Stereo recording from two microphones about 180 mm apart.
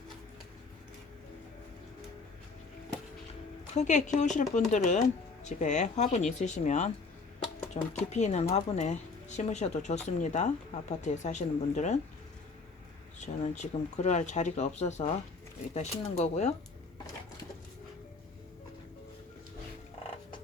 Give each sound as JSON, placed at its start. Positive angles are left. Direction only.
{"t": 3.8, "sound": "speech", "side_deg": 40}
{"t": 13.1, "sound": "speech", "side_deg": 40}